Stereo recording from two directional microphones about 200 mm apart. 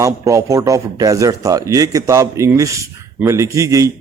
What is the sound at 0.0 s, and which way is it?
A man's voice, 15° right (ahead or behind).